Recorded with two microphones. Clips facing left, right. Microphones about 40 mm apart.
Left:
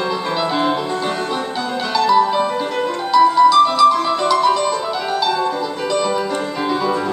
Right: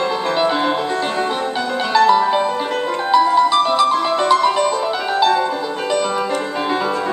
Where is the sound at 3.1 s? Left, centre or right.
Right.